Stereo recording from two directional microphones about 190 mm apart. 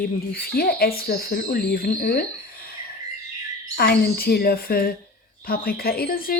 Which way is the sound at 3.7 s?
55° left (ahead or behind).